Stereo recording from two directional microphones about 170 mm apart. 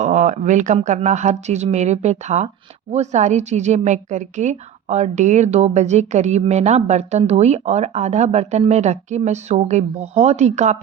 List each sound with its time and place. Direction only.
0.0 s a woman's voice: 45° right (ahead or behind)